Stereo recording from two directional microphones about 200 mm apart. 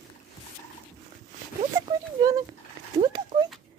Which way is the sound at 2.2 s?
15° right (ahead or behind).